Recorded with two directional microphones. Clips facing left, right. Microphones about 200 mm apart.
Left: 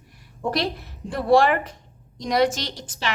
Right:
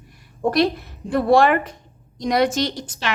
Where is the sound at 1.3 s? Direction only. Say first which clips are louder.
Right 1 dB; 55° right (ahead or behind).